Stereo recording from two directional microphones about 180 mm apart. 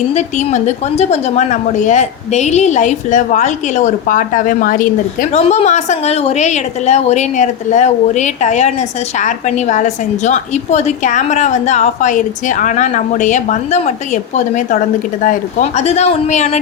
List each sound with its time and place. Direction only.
0.1 s a woman's voice: 40° left (ahead or behind)
5.3 s a woman's voice: 35° left (ahead or behind)